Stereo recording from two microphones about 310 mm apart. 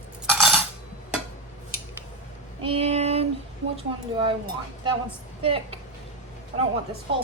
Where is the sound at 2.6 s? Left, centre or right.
Centre.